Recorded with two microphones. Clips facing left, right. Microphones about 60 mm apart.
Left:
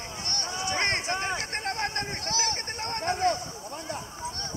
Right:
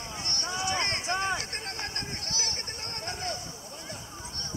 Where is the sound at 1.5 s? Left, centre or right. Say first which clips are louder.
Left 7 dB; left.